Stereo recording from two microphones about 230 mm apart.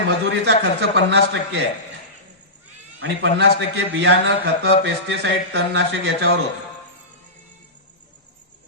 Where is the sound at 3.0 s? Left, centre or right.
Right.